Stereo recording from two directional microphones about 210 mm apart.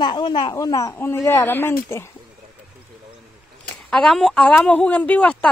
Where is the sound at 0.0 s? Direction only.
20° left (ahead or behind).